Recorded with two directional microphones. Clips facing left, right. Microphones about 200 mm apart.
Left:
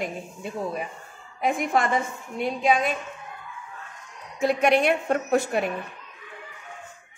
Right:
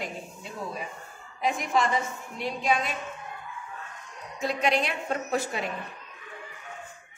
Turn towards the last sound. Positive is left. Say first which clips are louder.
# left 6 dB
turn(degrees=60)  # may be behind; listen again after turning